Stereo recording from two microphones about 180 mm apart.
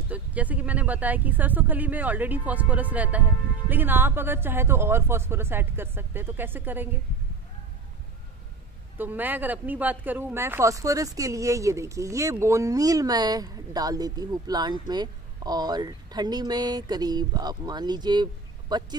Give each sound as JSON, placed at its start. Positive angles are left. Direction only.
{"t": 0.1, "sound": "speech", "side_deg": -10}
{"t": 8.9, "sound": "speech", "side_deg": -10}